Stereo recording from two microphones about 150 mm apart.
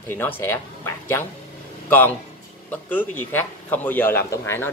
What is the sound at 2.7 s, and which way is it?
A man's voice, 10° left (ahead or behind).